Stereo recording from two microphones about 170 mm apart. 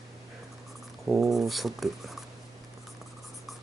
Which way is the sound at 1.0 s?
Centre (ahead or behind).